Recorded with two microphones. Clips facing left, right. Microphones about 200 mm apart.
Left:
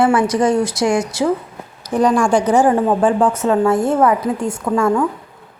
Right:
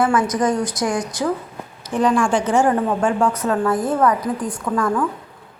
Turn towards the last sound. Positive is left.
turn(degrees=25)  # may be behind; listen again after turning